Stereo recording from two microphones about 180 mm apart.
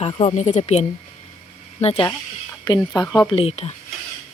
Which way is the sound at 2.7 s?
25° left (ahead or behind).